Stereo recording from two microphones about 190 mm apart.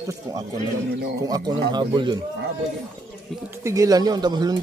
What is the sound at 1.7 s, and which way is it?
Speech, 25° right (ahead or behind).